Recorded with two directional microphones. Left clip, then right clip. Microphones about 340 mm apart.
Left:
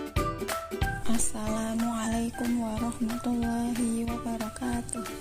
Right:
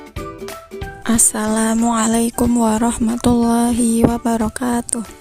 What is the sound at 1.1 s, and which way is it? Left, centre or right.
Speech, right.